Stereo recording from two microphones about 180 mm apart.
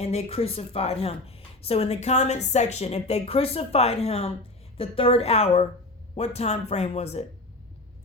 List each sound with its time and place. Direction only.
0.0 s speech: 35° left (ahead or behind)